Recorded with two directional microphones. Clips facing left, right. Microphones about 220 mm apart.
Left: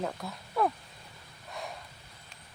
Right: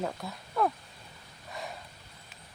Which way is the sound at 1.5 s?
Centre (ahead or behind).